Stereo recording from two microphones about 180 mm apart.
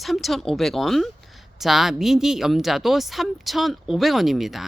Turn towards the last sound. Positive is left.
turn(degrees=0)  # may be behind; listen again after turning